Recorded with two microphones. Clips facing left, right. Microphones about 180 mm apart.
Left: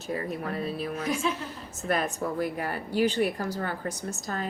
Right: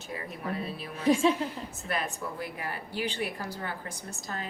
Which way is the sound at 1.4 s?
35° right (ahead or behind).